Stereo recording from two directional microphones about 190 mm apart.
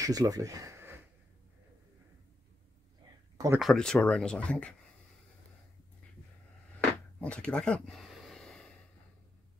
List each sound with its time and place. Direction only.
0.0 s speech: 20° right (ahead or behind)
3.3 s speech: 15° right (ahead or behind)
3.6 s speech: 5° left (ahead or behind)
7.2 s a sound: 5° left (ahead or behind)